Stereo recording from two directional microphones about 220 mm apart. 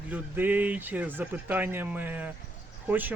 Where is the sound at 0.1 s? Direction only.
10° right (ahead or behind).